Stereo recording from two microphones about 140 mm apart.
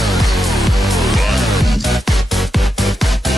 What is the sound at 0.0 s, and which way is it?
Music, centre (ahead or behind).